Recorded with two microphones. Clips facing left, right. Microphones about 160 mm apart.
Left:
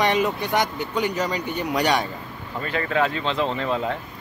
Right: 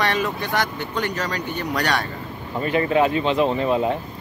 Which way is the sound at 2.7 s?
20° right (ahead or behind).